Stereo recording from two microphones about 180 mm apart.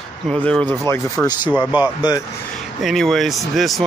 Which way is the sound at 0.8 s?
15° left (ahead or behind).